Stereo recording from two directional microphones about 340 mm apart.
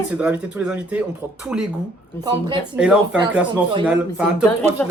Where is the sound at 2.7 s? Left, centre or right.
Centre.